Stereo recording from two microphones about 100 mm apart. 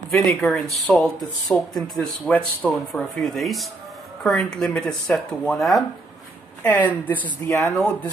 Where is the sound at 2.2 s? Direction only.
15° left (ahead or behind).